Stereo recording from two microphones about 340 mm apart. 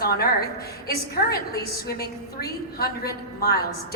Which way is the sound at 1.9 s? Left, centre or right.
Left.